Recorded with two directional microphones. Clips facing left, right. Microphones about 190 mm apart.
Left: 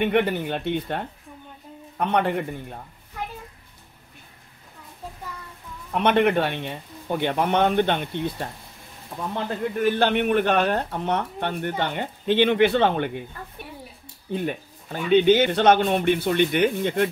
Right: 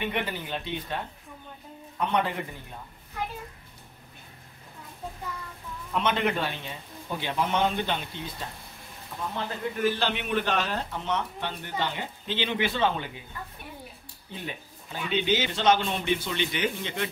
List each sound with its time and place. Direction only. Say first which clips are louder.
0.0 s speech: left 10 dB; 55° left (ahead or behind)
5.9 s speech: left 7 dB; 60° left (ahead or behind)
9.8 s speech: left 7 dB; 55° left (ahead or behind)
14.3 s speech: left 11 dB; 50° left (ahead or behind)